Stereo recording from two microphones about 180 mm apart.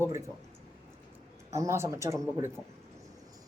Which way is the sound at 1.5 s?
15° right (ahead or behind).